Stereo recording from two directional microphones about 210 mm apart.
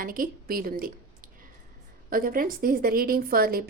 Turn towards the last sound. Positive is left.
turn(degrees=-45)  # may be behind; listen again after turning